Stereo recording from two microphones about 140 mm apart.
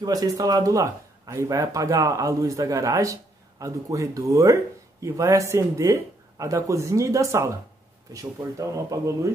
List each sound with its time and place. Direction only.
0.0 s speech: 25° right (ahead or behind)